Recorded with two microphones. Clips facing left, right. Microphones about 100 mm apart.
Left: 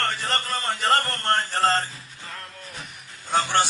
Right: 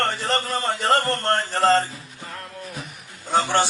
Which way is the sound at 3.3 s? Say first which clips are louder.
Right 2 dB; 15° right (ahead or behind).